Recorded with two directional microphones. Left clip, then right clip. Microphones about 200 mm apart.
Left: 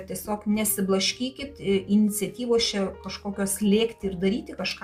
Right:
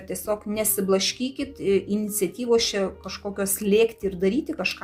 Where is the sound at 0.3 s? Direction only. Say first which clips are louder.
Right 3 dB; 40° right (ahead or behind).